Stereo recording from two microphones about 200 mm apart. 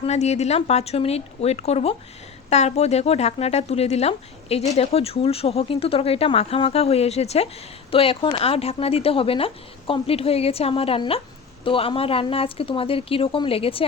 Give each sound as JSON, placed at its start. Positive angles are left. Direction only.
{"t": 0.0, "sound": "speech", "side_deg": 35}